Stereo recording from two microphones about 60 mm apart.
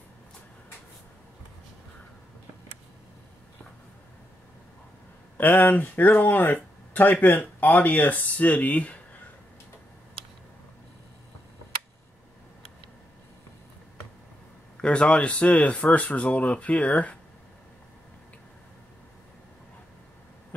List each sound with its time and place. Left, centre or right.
5.4 s speech: left
14.8 s speech: centre